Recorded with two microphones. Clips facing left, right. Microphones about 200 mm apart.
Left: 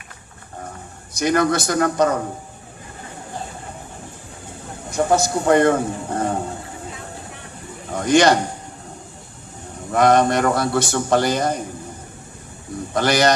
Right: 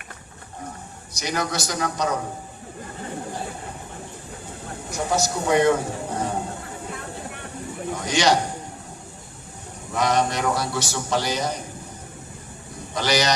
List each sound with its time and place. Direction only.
1.1 s a man's voice: 55° left (ahead or behind)
4.9 s a man's voice: 55° left (ahead or behind)
7.9 s a man's voice: 55° left (ahead or behind)
9.9 s a man's voice: 55° left (ahead or behind)
12.9 s speech: 55° left (ahead or behind)